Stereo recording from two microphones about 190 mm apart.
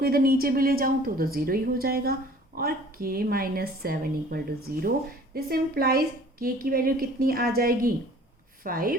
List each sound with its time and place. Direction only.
0.0 s a woman's voice: 50° right (ahead or behind)